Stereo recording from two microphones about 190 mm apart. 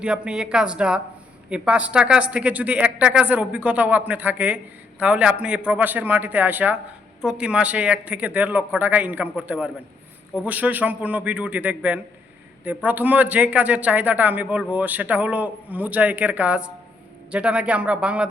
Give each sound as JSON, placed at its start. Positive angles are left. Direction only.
{"t": 0.0, "sound": "a woman's voice", "side_deg": -5}